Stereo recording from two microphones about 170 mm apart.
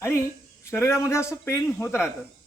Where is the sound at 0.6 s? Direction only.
15° left (ahead or behind).